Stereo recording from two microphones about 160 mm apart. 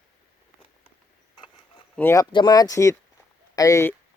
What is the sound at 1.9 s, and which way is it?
Speech, 15° left (ahead or behind).